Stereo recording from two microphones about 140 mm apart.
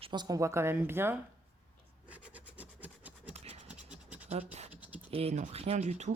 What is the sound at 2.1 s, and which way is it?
Scratch, 10° right (ahead or behind).